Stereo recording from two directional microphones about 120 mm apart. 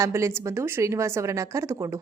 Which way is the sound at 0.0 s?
20° right (ahead or behind).